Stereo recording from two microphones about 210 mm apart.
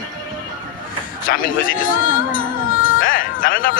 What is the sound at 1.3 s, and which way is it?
Speech, 40° left (ahead or behind).